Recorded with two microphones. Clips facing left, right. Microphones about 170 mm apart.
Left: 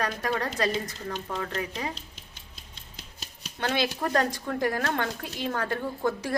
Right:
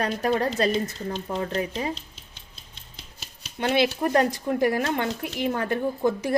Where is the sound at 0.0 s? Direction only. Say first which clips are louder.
Right 5 dB; 25° right (ahead or behind).